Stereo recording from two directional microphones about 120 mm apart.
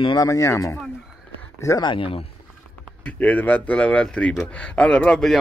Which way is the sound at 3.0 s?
10° left (ahead or behind).